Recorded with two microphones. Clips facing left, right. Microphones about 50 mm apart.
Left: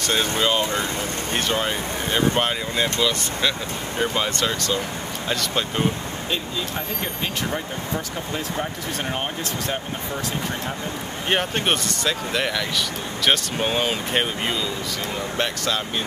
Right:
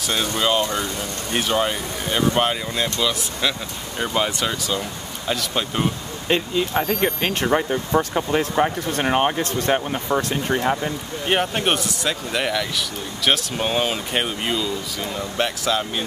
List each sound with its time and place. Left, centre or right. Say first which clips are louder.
0.4 s speech: right 1 dB; centre
7.0 s speech: right 6 dB; right
8.5 s speech: right 7 dB; right
11.2 s speech: right 2 dB; centre